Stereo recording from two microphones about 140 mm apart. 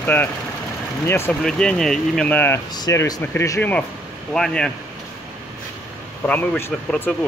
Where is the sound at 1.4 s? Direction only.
5° left (ahead or behind).